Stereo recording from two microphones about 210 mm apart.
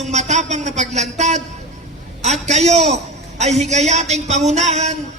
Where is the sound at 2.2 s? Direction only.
30° right (ahead or behind).